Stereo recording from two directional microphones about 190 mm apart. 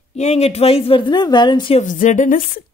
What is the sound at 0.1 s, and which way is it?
A woman's voice, 35° left (ahead or behind).